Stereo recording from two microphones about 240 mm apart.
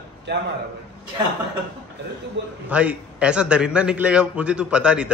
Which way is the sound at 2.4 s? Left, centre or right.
Right.